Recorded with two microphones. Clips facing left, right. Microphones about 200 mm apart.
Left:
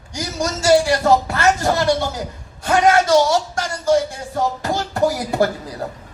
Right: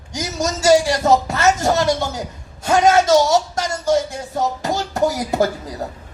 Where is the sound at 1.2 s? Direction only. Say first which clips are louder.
Right 1 dB; 20° right (ahead or behind).